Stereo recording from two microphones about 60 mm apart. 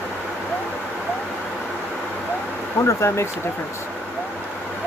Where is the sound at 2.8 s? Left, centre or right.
Left.